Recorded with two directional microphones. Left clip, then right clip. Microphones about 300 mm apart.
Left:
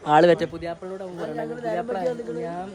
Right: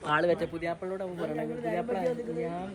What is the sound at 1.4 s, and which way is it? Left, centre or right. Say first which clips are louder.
Speech: left 7 dB; centre.